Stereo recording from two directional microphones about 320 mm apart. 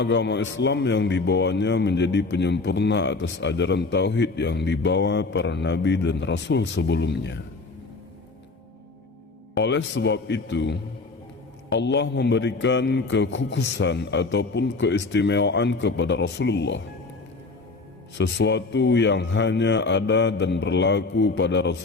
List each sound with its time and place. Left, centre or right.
0.0 s speech: left
9.6 s speech: left
18.2 s speech: left